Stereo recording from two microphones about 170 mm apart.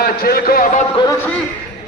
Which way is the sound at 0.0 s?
65° left (ahead or behind).